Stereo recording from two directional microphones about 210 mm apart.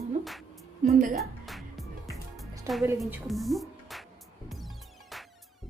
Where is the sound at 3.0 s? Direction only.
Centre (ahead or behind).